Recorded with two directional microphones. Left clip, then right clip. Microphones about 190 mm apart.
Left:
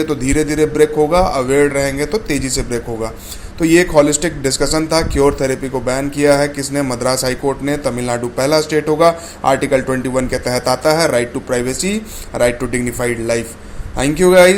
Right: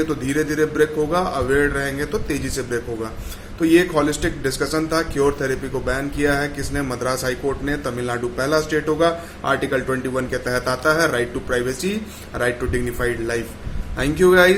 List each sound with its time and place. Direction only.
0.0 s a man's voice: 30° left (ahead or behind)